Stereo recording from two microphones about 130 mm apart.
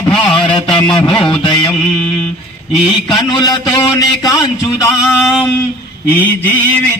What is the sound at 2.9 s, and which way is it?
Speech, 35° left (ahead or behind).